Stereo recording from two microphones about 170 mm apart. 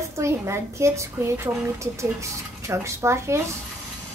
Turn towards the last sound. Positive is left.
turn(degrees=-15)  # may be behind; listen again after turning